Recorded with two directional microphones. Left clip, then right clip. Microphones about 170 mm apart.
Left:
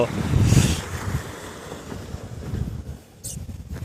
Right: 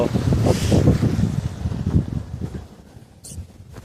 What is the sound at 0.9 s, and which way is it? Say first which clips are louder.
Vehicle: right 10 dB; 35° left (ahead or behind).